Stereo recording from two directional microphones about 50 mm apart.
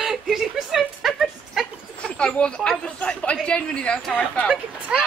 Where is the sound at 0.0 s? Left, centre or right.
Centre.